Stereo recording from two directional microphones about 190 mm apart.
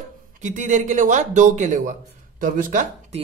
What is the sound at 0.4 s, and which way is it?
Speech, 40° right (ahead or behind).